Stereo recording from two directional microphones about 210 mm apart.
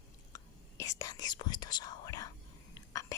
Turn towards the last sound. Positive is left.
turn(degrees=15)  # may be behind; listen again after turning